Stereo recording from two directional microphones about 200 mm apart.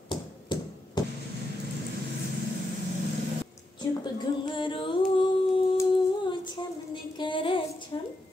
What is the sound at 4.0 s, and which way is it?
Music, 20° left (ahead or behind).